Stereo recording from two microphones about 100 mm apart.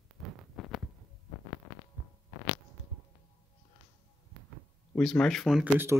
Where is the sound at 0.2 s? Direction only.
Centre (ahead or behind).